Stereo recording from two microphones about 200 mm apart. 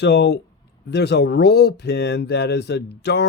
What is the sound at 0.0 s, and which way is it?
Speech, 55° left (ahead or behind).